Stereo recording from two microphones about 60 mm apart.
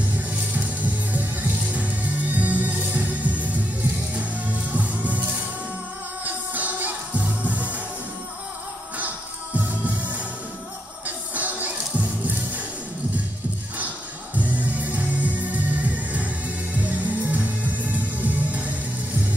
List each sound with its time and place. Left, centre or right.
0.8 s music: right
4.7 s music: right
6.2 s music: right
9.8 s music: right
14.4 s music: right